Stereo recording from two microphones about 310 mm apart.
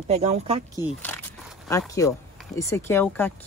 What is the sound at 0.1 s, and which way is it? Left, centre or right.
Speech, centre.